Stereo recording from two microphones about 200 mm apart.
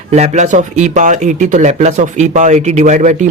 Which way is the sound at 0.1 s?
35° right (ahead or behind).